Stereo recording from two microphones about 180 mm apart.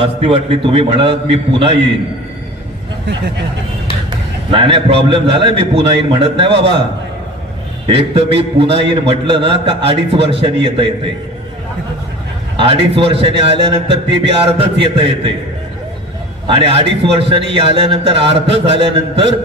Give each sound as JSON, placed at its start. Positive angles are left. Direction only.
{"t": 0.0, "sound": "a man's voice", "side_deg": -30}
{"t": 4.5, "sound": "a man's voice", "side_deg": -30}
{"t": 7.9, "sound": "a man's voice", "side_deg": -30}
{"t": 12.5, "sound": "a man's voice", "side_deg": -30}
{"t": 16.4, "sound": "a man's voice", "side_deg": -30}